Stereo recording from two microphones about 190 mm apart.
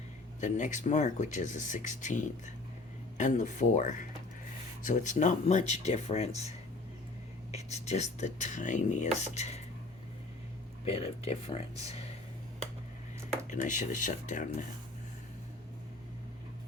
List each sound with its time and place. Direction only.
0.3 s speech: 40° left (ahead or behind)
7.5 s speech: 35° left (ahead or behind)
10.8 s speech: 30° left (ahead or behind)
13.5 s speech: 40° left (ahead or behind)